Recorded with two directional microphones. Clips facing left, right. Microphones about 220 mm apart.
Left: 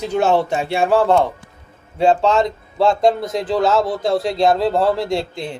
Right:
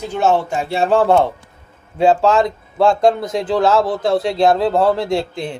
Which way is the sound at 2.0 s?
5° right (ahead or behind).